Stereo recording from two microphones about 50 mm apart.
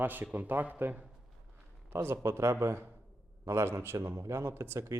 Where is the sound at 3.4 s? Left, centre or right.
Right.